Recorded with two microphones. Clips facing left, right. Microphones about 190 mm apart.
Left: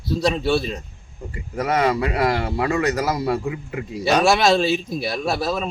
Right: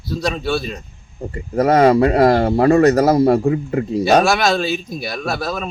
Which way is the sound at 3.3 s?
45° right (ahead or behind).